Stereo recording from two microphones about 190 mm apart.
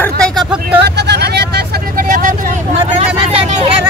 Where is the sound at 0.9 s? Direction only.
60° right (ahead or behind); by 2.5 s 45° right (ahead or behind).